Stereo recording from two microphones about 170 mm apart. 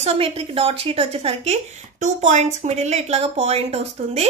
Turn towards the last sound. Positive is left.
turn(degrees=-35)  # may be behind; listen again after turning